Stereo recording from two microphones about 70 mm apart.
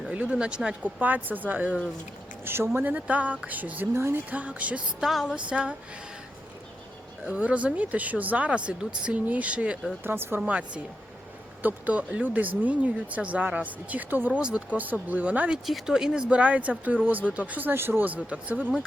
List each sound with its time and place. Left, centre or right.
0.1 s speech: centre
2.4 s speech: right
3.9 s speech: right
4.3 s speech: centre
4.9 s speech: centre
7.3 s speech: centre
10.0 s speech: right
10.4 s speech: centre
15.6 s speech: centre
16.3 s speech: centre